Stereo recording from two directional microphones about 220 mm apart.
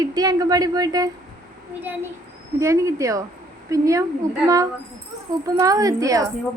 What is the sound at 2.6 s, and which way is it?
A woman's voice, 15° right (ahead or behind).